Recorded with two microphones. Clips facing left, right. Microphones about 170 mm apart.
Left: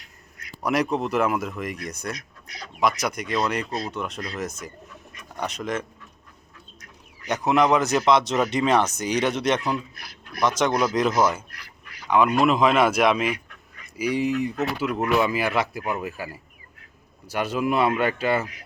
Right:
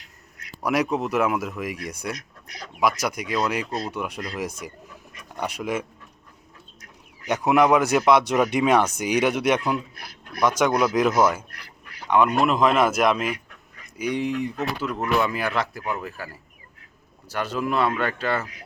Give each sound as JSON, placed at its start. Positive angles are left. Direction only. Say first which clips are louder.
{"t": 0.6, "sound": "speech", "louder": "even", "side_deg": -5}
{"t": 7.3, "sound": "speech", "louder": "right 2 dB", "side_deg": -10}
{"t": 10.6, "sound": "speech", "louder": "right 2 dB", "side_deg": -5}